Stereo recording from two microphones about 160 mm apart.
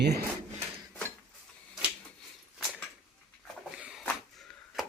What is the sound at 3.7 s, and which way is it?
Dog, 5° right (ahead or behind).